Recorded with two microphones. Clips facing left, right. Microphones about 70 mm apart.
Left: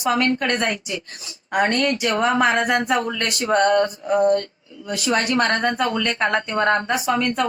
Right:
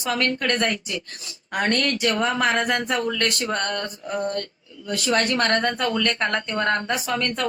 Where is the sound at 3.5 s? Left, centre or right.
Centre.